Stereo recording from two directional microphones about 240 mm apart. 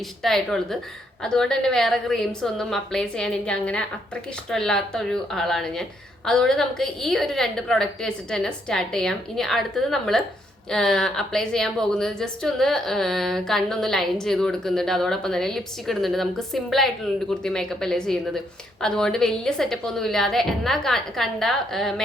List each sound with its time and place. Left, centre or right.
0.2 s a woman's voice: centre